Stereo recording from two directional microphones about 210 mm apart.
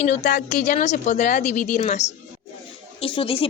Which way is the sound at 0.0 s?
35° left (ahead or behind).